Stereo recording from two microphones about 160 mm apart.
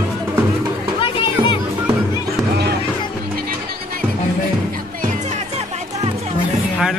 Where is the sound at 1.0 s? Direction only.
30° left (ahead or behind).